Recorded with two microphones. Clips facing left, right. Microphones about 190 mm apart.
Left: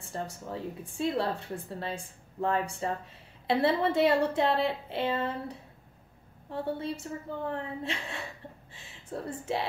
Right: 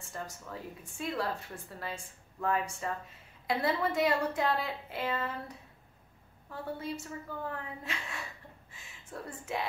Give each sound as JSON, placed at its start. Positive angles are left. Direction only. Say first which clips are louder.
{"t": 0.1, "sound": "a woman's voice", "louder": "left 6 dB", "side_deg": 30}